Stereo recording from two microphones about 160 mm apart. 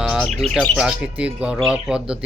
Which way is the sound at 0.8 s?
5° right (ahead or behind).